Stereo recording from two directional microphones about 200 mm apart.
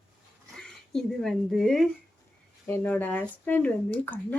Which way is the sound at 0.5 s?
5° left (ahead or behind).